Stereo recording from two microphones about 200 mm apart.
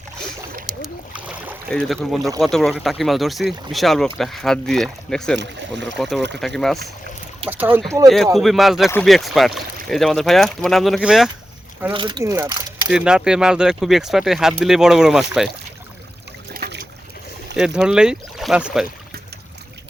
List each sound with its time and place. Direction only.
0.8 s boat: 5° right (ahead or behind)
1.7 s speech: 5° left (ahead or behind); by 8.1 s 15° right (ahead or behind)
8.1 s speech: centre (ahead or behind)
11.9 s speech: 25° right (ahead or behind)
12.9 s speech: 5° right (ahead or behind)
17.7 s speech: 5° right (ahead or behind)